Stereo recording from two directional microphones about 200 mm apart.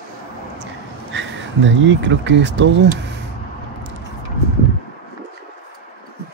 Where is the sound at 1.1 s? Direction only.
70° right (ahead or behind).